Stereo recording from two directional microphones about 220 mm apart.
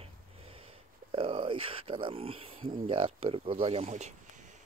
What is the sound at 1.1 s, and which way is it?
Speech, 25° right (ahead or behind).